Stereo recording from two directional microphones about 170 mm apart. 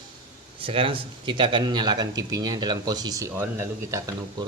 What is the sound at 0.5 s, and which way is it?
Speech, 30° right (ahead or behind).